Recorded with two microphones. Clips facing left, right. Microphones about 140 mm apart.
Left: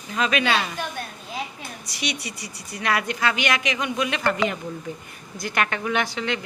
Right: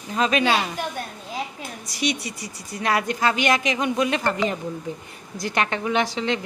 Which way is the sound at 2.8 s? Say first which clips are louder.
Right 2 dB; 35° right (ahead or behind).